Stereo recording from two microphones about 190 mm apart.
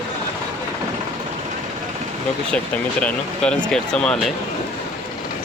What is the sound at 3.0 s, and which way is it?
Speech, 5° left (ahead or behind).